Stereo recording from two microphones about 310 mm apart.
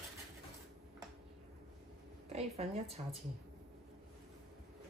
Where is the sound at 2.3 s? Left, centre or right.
Centre.